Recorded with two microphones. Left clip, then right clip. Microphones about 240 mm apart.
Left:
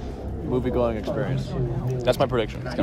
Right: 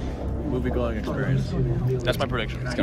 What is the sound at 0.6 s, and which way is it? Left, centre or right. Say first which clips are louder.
Speech: left 5 dB; left.